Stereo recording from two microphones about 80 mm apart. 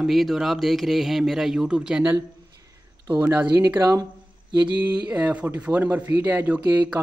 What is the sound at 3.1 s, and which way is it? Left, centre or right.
Speech, right.